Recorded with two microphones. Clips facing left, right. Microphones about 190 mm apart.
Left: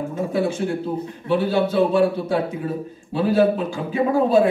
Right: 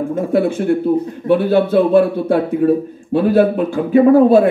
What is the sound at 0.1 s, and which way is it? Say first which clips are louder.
A man's voice: right 7 dB; 60° right (ahead or behind).